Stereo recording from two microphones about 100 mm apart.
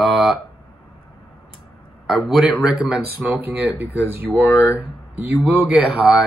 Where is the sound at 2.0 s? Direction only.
5° right (ahead or behind).